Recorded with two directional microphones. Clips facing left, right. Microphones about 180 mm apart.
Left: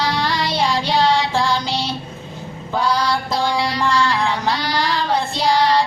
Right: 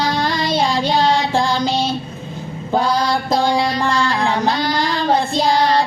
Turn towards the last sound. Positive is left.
turn(degrees=-50)  # may be behind; listen again after turning